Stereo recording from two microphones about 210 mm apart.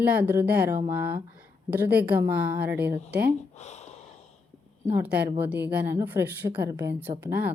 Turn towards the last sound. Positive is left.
turn(degrees=-10)  # may be behind; listen again after turning